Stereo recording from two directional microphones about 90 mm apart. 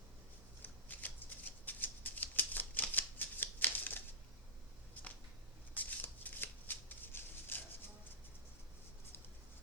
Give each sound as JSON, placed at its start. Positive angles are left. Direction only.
{"t": 0.6, "sound": "shuffling cards", "side_deg": 20}
{"t": 5.7, "sound": "shuffling cards", "side_deg": 20}